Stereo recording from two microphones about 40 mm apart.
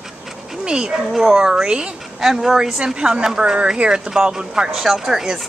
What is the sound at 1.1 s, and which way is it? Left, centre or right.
Speech, centre.